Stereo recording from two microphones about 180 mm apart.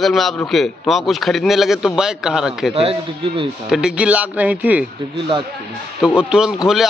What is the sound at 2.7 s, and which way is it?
Speech, 35° right (ahead or behind).